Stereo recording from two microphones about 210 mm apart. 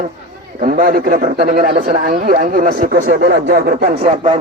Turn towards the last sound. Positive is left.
turn(degrees=-30)  # may be behind; listen again after turning